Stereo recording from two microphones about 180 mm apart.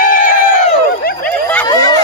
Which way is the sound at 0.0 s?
50° left (ahead or behind).